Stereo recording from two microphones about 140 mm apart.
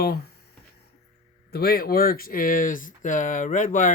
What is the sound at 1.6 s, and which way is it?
Speech, 90° left.